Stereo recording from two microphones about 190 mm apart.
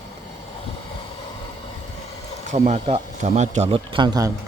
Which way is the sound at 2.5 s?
40° right (ahead or behind).